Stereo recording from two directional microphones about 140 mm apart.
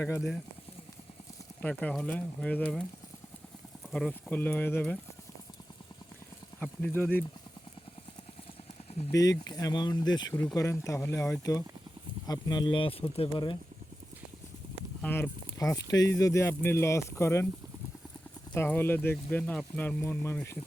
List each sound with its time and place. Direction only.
1.7 s speech: 5° left (ahead or behind)
3.9 s speech: 10° left (ahead or behind)
6.6 s speech: 10° left (ahead or behind)
9.1 s speech: 25° left (ahead or behind)
15.0 s speech: 15° left (ahead or behind)
18.5 s speech: 15° left (ahead or behind)